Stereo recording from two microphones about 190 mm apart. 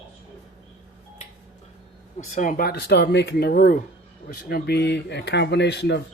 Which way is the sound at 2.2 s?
45° left (ahead or behind).